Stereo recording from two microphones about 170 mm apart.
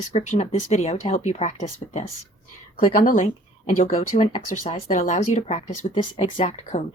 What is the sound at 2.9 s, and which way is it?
Speech, 50° left (ahead or behind).